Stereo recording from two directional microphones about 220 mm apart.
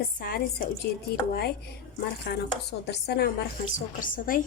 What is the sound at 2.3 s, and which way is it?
A woman's voice, 50° left (ahead or behind).